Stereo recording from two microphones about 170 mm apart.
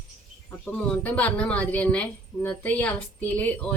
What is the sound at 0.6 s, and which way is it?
Speech, 5° left (ahead or behind).